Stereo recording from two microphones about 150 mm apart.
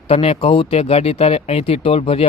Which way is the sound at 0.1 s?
40° left (ahead or behind).